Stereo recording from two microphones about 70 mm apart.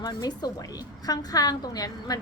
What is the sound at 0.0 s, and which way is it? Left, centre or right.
Speech, left.